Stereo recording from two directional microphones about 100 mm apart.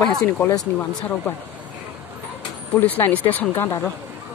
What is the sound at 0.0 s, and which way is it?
Speech, 5° left (ahead or behind).